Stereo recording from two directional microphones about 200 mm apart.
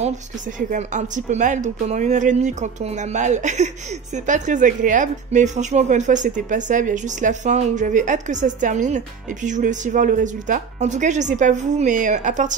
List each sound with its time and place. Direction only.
0.6 s speech: 40° right (ahead or behind)